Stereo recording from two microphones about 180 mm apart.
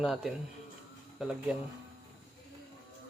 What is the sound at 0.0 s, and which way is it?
Speech, centre (ahead or behind).